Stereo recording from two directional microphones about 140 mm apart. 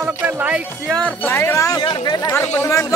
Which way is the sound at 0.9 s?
10° left (ahead or behind).